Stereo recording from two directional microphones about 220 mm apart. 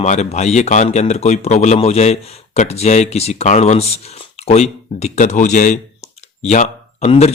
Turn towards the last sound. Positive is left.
turn(degrees=30)  # may be behind; listen again after turning